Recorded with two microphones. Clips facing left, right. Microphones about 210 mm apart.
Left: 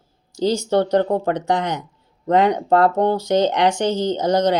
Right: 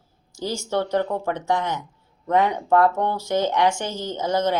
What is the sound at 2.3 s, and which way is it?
Speech, 70° left (ahead or behind).